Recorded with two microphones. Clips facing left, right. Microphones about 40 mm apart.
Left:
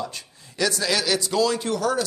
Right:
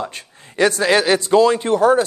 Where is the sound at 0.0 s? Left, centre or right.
Right.